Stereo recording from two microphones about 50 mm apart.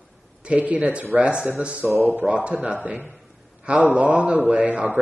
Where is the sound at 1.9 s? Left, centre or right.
Right.